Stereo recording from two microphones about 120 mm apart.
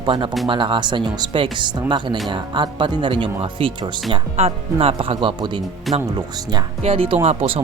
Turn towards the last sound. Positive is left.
turn(degrees=-60)  # may be behind; listen again after turning